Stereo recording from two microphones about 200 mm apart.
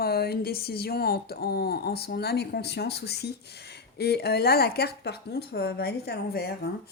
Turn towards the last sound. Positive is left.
turn(degrees=55)  # may be behind; listen again after turning